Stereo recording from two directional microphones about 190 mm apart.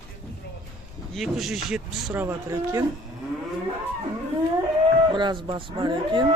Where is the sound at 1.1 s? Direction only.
Centre (ahead or behind).